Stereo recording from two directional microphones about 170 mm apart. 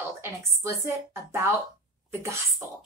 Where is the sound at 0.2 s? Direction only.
15° right (ahead or behind).